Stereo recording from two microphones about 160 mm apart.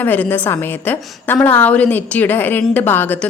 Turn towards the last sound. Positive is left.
turn(degrees=10)  # may be behind; listen again after turning